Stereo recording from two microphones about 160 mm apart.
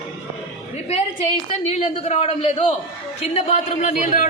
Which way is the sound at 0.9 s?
45° left (ahead or behind).